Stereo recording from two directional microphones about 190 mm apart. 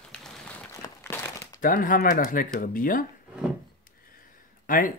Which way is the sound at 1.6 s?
45° left (ahead or behind).